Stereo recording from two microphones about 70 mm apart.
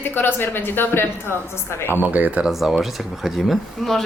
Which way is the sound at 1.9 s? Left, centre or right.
Right.